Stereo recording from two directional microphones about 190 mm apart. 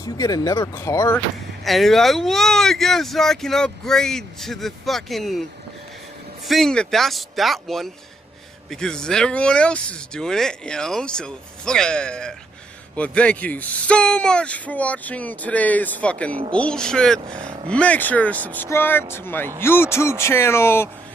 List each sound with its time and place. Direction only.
0.0 s speech: 20° left (ahead or behind)
1.6 s speech: centre (ahead or behind)
6.4 s speech: centre (ahead or behind)